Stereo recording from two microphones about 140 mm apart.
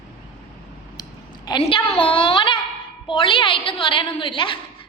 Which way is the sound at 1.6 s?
40° left (ahead or behind).